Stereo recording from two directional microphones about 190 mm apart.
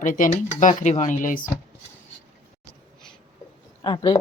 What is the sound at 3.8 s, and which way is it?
Speech, 20° left (ahead or behind).